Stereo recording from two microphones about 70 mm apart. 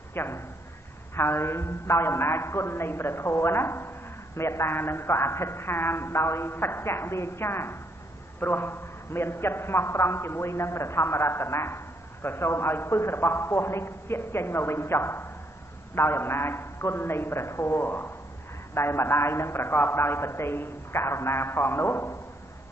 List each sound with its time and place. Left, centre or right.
0.1 s a man's voice: left